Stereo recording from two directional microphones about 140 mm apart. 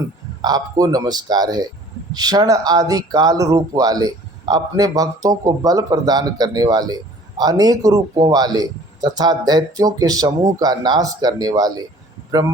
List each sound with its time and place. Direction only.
0.4 s speech: 25° right (ahead or behind)